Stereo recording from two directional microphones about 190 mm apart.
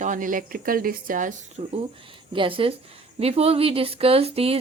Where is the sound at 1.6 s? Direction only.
35° right (ahead or behind).